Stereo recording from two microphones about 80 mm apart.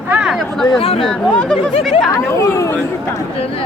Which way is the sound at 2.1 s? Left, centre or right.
Left.